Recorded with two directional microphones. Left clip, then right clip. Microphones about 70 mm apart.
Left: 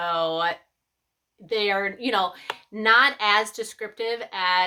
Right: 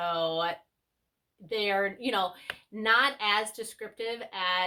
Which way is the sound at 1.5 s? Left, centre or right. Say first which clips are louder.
Left 4 dB; left.